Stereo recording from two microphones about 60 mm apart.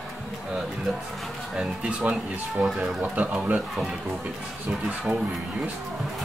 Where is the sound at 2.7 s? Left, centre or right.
Right.